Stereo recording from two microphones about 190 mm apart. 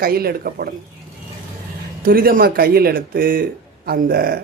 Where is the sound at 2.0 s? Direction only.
50° right (ahead or behind).